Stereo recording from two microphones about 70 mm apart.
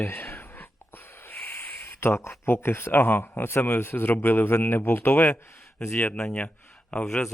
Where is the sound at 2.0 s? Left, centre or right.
Left.